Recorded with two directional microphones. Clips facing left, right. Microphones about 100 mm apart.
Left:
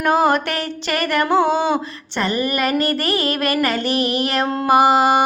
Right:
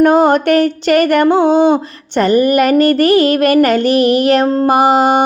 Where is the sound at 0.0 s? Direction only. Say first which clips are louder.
Right 7 dB; 50° right (ahead or behind).